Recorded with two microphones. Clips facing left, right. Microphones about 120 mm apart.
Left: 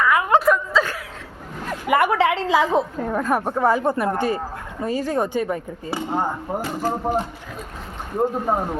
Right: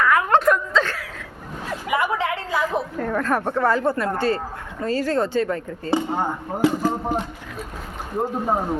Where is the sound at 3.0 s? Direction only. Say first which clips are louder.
Left 1 dB; 15° left (ahead or behind).